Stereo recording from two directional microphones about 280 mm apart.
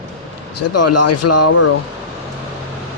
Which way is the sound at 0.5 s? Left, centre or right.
Left.